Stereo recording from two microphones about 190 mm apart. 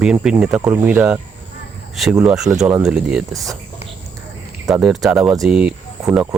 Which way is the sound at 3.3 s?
15° right (ahead or behind).